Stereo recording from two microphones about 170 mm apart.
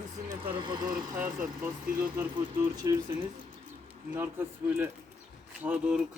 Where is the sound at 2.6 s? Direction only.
20° right (ahead or behind).